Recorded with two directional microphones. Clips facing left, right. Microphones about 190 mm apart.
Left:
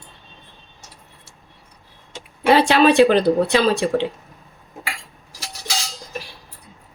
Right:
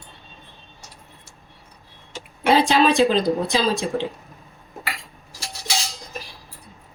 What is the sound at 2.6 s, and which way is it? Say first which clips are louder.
Speech: left 4 dB; 65° left (ahead or behind).